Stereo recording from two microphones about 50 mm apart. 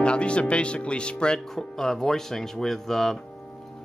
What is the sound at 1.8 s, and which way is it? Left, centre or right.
Speech, centre.